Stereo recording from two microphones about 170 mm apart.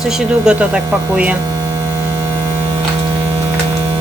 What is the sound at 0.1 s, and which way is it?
A man's voice, 5° right (ahead or behind).